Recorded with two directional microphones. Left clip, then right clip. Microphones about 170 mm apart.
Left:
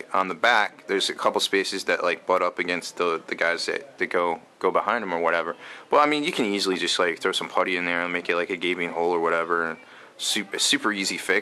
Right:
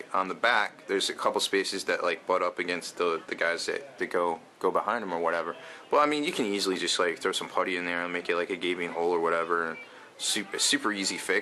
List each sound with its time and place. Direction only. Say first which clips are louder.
0.1 s speech: left 5 dB; 15° left (ahead or behind)